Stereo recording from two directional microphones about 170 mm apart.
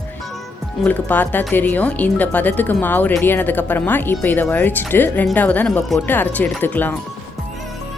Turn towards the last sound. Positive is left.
turn(degrees=10)  # may be behind; listen again after turning